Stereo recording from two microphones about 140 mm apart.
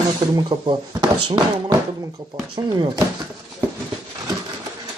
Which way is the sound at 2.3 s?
25° right (ahead or behind).